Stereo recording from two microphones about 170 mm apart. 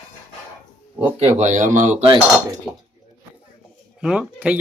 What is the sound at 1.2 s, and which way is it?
Speech, 40° right (ahead or behind).